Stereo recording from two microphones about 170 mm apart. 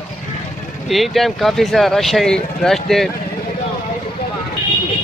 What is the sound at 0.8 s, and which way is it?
Speech, centre (ahead or behind).